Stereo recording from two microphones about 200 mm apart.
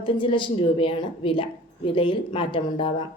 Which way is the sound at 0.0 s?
25° left (ahead or behind).